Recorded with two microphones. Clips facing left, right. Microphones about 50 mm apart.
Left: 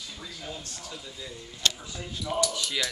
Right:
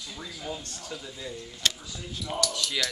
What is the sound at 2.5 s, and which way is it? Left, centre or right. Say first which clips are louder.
Laughter: even; centre.